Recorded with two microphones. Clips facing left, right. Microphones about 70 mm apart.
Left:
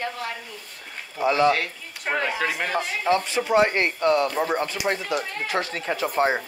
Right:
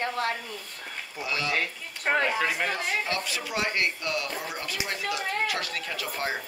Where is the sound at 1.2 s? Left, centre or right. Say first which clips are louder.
Left 12 dB; left.